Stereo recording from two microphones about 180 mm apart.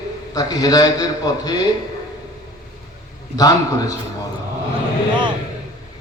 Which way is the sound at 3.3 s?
20° left (ahead or behind).